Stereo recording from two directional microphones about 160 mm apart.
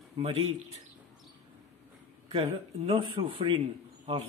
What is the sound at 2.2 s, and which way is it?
Speech, 35° right (ahead or behind).